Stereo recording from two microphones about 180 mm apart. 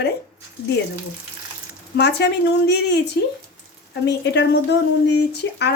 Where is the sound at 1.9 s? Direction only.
70° left (ahead or behind).